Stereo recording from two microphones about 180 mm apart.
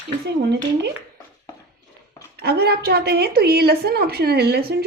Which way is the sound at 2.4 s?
60° right (ahead or behind).